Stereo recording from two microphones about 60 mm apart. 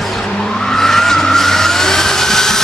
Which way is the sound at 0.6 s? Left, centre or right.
Centre.